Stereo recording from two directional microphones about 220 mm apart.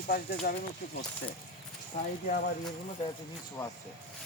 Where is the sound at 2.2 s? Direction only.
40° left (ahead or behind).